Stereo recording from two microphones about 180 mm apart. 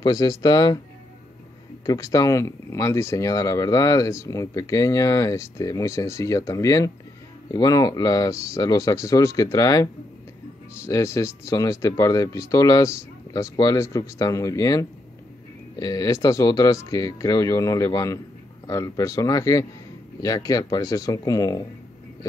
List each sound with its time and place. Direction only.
0.0 s speech: 20° left (ahead or behind)
1.9 s speech: 20° left (ahead or behind)